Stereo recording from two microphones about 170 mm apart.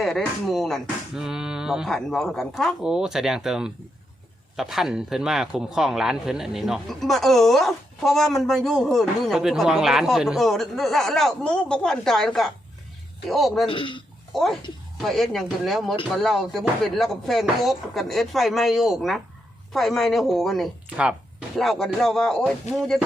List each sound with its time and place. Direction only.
0.0 s a man's voice: centre (ahead or behind)
13.7 s speech: 30° left (ahead or behind)
14.3 s a man's voice: centre (ahead or behind)